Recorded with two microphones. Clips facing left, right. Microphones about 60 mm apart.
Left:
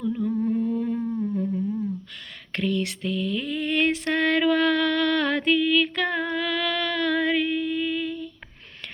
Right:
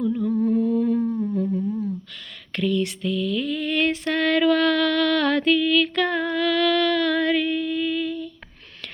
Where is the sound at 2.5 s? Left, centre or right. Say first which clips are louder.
Right 3 dB; left.